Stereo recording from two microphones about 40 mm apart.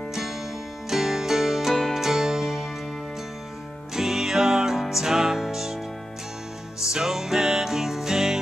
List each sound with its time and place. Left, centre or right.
0.1 s music: centre
3.9 s music: centre
6.8 s music: centre